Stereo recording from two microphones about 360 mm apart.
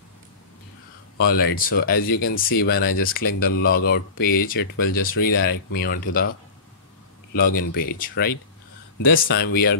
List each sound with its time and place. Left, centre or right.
1.2 s speech: left
7.3 s speech: left